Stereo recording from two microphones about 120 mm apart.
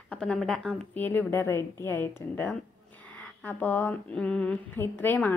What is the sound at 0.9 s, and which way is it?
A woman's voice, 15° left (ahead or behind).